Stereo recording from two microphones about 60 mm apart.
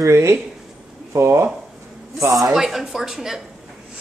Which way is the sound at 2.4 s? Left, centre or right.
Centre.